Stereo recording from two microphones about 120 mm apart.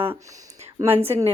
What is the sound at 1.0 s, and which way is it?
Speech, 20° right (ahead or behind).